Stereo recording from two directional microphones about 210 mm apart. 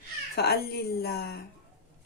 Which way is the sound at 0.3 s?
50° left (ahead or behind).